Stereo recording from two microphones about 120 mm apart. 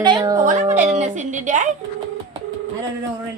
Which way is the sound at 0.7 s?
75° right (ahead or behind).